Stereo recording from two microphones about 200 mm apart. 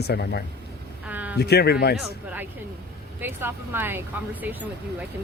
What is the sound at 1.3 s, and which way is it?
Speech, 55° left (ahead or behind).